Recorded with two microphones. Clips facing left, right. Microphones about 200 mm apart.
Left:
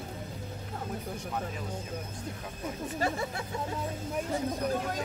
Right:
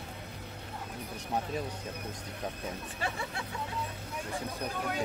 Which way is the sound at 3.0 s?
40° left (ahead or behind).